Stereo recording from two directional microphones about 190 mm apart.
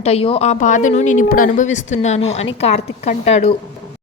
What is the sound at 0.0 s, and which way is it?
Speech, 30° left (ahead or behind).